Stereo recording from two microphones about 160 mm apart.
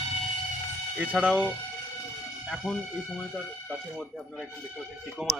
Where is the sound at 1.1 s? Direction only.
10° right (ahead or behind).